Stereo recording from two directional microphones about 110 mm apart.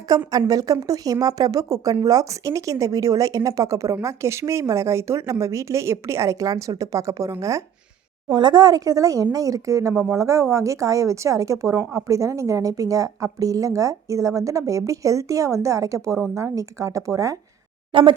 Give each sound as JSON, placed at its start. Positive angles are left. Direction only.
{"t": 0.3, "sound": "speech", "side_deg": -35}
{"t": 8.3, "sound": "speech", "side_deg": -45}
{"t": 17.9, "sound": "speech", "side_deg": -50}